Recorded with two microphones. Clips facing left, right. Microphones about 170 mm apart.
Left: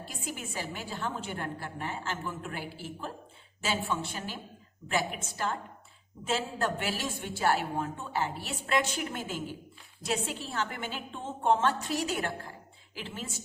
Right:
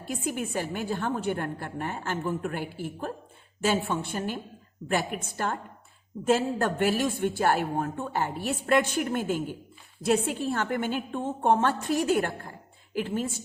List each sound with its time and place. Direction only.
0.0 s a woman's voice: 55° right (ahead or behind)